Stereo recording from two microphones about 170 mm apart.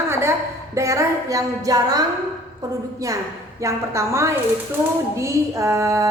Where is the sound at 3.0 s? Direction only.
20° right (ahead or behind).